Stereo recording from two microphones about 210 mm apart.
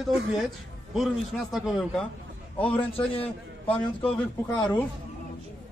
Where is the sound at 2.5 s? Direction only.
25° left (ahead or behind).